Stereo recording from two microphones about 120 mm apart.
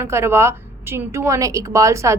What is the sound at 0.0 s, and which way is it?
A woman's voice, 20° right (ahead or behind).